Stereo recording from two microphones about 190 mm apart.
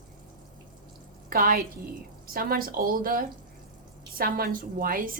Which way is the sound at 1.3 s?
50° right (ahead or behind).